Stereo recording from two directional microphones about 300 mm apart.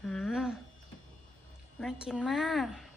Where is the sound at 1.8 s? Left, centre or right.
Centre.